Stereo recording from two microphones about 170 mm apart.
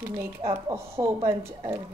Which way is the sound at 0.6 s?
15° right (ahead or behind).